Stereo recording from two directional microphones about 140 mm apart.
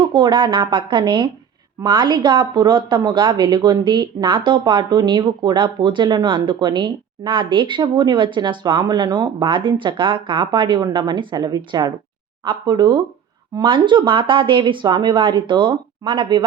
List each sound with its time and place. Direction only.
0.0 s speech: 35° right (ahead or behind)